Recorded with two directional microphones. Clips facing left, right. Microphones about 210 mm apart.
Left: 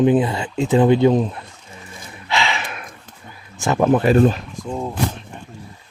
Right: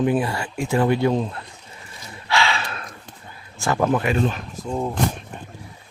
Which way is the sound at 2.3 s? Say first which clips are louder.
Even; 20° left (ahead or behind).